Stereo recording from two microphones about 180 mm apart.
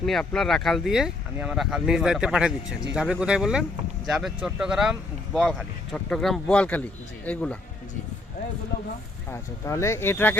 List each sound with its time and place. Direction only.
0.0 s speech: centre (ahead or behind)
9.3 s speech: 15° left (ahead or behind)